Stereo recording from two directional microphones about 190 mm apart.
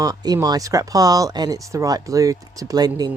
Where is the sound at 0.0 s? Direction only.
20° right (ahead or behind).